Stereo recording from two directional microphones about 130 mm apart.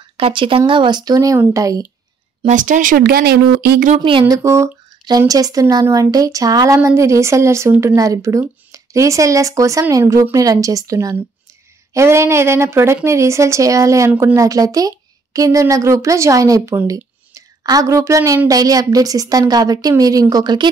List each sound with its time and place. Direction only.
0.2 s a woman's voice: 40° right (ahead or behind); by 1.8 s 25° right (ahead or behind)
2.4 s speech: 80° right
4.0 s speech: 40° right (ahead or behind)
4.3 s a woman's voice: 25° right (ahead or behind)